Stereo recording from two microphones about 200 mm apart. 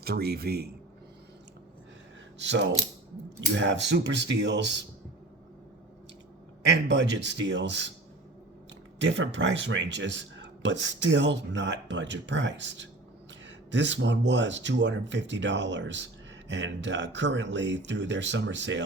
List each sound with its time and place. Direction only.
0.0 s speech: 50° right (ahead or behind)
2.4 s speech: 60° right (ahead or behind)
6.7 s speech: 60° right (ahead or behind)
9.0 s speech: 60° right (ahead or behind)